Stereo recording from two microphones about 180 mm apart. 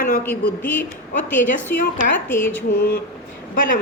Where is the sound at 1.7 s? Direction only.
60° left (ahead or behind).